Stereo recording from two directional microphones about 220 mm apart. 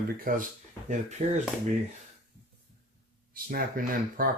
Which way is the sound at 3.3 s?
40° right (ahead or behind).